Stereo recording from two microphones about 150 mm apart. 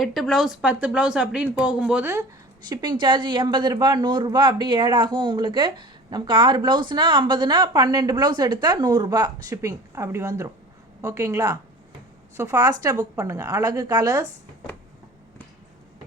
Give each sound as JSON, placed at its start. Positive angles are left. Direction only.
{"t": 0.0, "sound": "speech", "side_deg": 0}
{"t": 2.6, "sound": "speech", "side_deg": -30}